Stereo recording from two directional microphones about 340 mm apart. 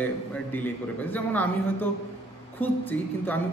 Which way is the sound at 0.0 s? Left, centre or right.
Centre.